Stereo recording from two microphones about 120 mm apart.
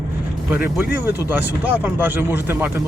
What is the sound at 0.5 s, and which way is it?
Speech, 15° right (ahead or behind).